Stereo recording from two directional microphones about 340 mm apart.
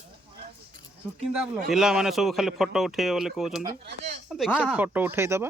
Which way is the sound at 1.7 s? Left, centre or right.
Centre.